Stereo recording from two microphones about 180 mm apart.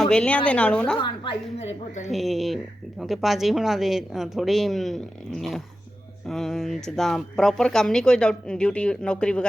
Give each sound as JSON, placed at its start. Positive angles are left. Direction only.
{"t": 0.0, "sound": "speech", "side_deg": 5}
{"t": 0.9, "sound": "a woman's voice", "side_deg": 25}
{"t": 2.1, "sound": "speech", "side_deg": 0}